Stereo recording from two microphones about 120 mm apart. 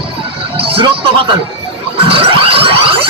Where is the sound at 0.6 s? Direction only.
50° right (ahead or behind).